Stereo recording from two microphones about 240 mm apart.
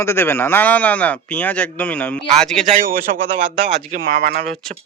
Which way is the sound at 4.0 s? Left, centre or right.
Right.